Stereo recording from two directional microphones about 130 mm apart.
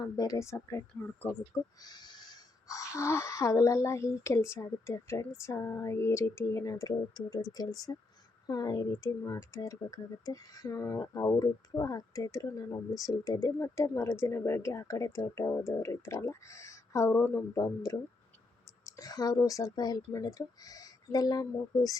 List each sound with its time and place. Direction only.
0.0 s speech: 30° left (ahead or behind)